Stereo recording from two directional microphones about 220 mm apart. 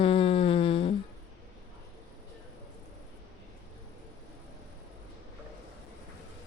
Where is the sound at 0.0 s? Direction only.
25° left (ahead or behind).